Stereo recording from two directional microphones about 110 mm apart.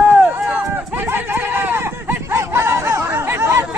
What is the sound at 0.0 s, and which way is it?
Run, 15° right (ahead or behind).